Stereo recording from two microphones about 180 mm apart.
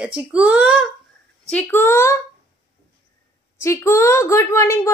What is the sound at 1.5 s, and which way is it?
Speech, 10° left (ahead or behind).